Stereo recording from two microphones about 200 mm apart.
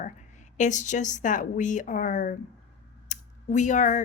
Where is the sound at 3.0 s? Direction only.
40° left (ahead or behind).